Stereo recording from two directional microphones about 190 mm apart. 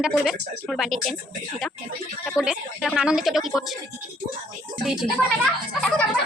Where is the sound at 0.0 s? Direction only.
Centre (ahead or behind).